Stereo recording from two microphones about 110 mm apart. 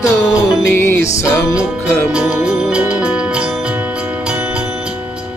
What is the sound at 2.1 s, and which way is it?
Music, 10° right (ahead or behind).